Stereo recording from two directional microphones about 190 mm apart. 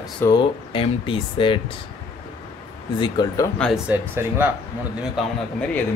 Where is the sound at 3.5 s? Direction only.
5° left (ahead or behind).